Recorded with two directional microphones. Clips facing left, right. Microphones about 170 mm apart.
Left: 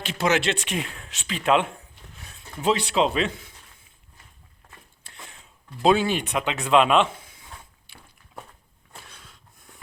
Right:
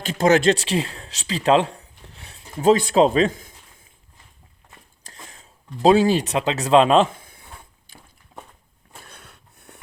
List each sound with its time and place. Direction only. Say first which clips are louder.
0.1 s speech: right 7 dB; 45° right (ahead or behind); by 2.5 s 30° right (ahead or behind)
2.6 s speech: right 7 dB; 45° right (ahead or behind)
5.0 s a sound: right 2 dB; 40° right (ahead or behind)
5.8 s speech: right 5 dB; 35° right (ahead or behind)
8.3 s walk: even; 40° right (ahead or behind)
9.0 s a sound: right 3 dB; 60° right (ahead or behind)